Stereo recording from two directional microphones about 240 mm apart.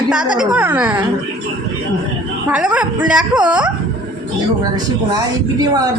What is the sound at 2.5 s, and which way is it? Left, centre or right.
A woman's voice, centre.